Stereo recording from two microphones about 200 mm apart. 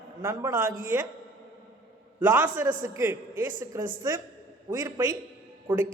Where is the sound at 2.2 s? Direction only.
10° right (ahead or behind).